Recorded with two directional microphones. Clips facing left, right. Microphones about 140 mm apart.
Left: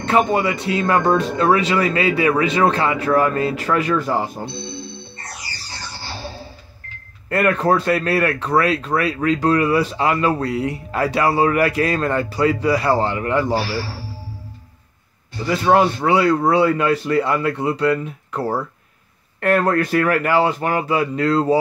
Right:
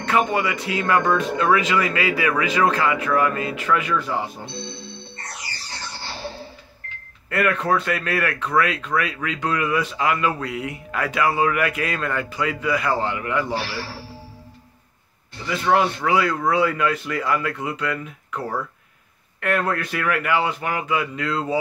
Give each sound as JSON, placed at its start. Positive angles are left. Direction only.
{"t": 0.0, "sound": "speech", "side_deg": 30}
{"t": 7.2, "sound": "speech", "side_deg": 35}
{"t": 15.3, "sound": "speech", "side_deg": 40}